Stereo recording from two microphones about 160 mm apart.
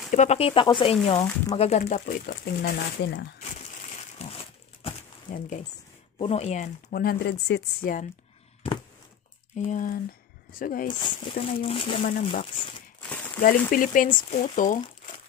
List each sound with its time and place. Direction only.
0.1 s speech: 45° left (ahead or behind)
2.0 s speech: 65° left (ahead or behind); by 3.3 s 90° left
3.3 s crumpling: 45° left (ahead or behind)
5.3 s speech: 60° left (ahead or behind)
6.1 s speech: 40° left (ahead or behind)
6.9 s speech: 70° left (ahead or behind); by 7.9 s 90° left
9.6 s speech: 55° left (ahead or behind)
10.9 s speech: 30° left (ahead or behind)
12.0 s speech: 50° left (ahead or behind)
13.1 s a sound: 10° left (ahead or behind)
13.4 s speech: 60° left (ahead or behind)